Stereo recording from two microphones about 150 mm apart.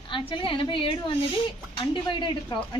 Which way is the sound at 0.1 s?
35° left (ahead or behind).